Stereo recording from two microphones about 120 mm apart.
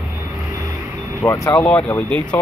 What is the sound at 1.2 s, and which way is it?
Speech, 25° left (ahead or behind).